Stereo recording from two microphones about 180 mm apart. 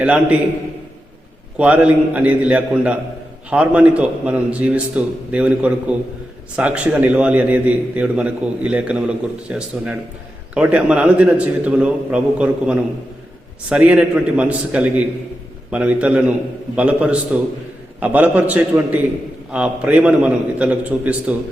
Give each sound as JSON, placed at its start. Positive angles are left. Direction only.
{"t": 0.0, "sound": "a man's voice", "side_deg": -5}
{"t": 1.5, "sound": "a man's voice", "side_deg": -5}